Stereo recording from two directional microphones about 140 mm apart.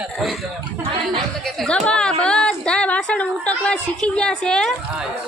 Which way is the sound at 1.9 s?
5° left (ahead or behind).